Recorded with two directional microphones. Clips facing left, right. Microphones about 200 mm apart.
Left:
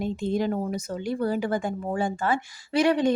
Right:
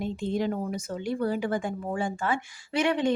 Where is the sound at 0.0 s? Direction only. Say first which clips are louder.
Left 2 dB; 40° left (ahead or behind).